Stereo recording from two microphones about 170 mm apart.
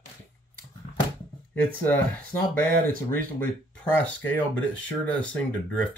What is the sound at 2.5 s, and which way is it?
Speech, 55° right (ahead or behind).